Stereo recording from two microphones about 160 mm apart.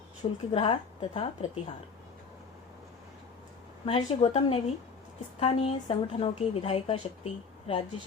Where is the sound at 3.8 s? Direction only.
35° left (ahead or behind).